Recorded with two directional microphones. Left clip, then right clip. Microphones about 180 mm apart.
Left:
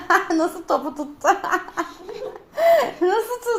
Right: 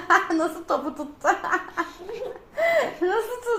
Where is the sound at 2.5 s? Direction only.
35° left (ahead or behind).